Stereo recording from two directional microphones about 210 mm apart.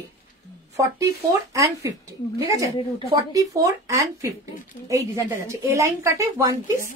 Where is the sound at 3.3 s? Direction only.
15° right (ahead or behind).